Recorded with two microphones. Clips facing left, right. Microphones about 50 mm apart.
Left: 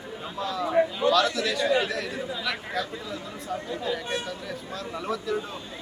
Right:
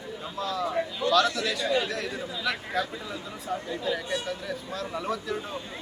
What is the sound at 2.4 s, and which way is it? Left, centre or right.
Speech, centre.